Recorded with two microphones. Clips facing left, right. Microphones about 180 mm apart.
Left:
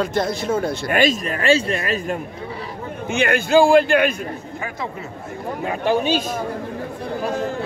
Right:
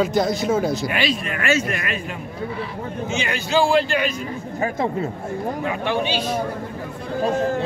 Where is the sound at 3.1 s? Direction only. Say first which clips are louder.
Left 8 dB; 55° left (ahead or behind).